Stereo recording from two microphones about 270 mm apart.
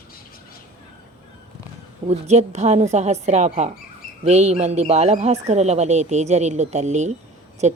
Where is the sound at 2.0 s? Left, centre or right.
Right.